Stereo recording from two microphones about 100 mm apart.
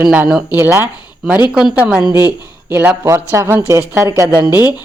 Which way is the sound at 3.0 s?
30° right (ahead or behind).